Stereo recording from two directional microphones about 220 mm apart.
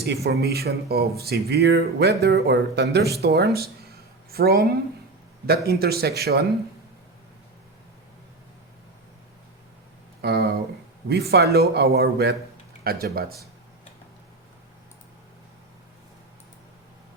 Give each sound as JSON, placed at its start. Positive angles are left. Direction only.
{"t": 0.0, "sound": "a woman's voice", "side_deg": -50}
{"t": 10.2, "sound": "a sound", "side_deg": -45}
{"t": 11.1, "sound": "speech", "side_deg": -45}